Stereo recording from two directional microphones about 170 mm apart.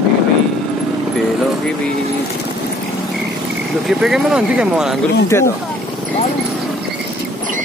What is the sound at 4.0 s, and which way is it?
Speech, 5° right (ahead or behind).